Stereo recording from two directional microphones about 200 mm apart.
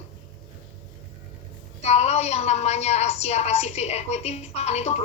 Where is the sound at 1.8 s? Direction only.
30° left (ahead or behind).